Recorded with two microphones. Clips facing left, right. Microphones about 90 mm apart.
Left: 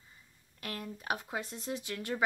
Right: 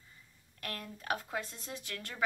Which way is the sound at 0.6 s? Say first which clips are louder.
Left 2 dB; 10° left (ahead or behind).